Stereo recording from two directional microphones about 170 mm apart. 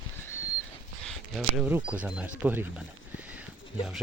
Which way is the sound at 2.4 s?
10° right (ahead or behind).